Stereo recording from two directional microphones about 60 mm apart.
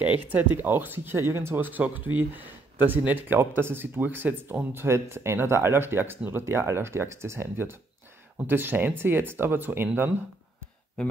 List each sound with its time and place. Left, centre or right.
0.0 s speech: right